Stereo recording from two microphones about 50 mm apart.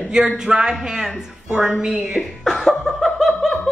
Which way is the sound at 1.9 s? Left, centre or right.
Right.